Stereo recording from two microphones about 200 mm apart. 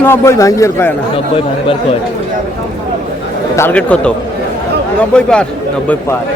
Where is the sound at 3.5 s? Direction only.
10° left (ahead or behind).